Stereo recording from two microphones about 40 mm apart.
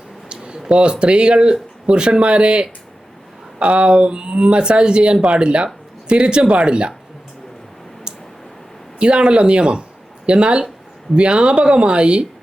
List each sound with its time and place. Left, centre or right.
0.3 s a sound: right
0.7 s speech: right
9.0 s speech: right